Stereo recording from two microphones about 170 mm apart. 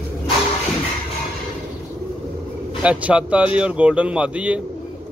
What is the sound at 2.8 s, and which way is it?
Speech, 5° right (ahead or behind).